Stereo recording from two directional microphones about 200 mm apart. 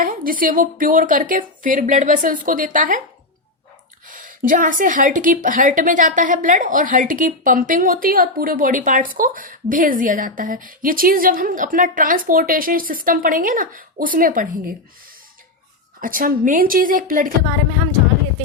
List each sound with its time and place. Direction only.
0.0 s a woman's voice: 45° right (ahead or behind)
4.1 s a woman's voice: 45° right (ahead or behind)
16.0 s a woman's voice: 45° right (ahead or behind)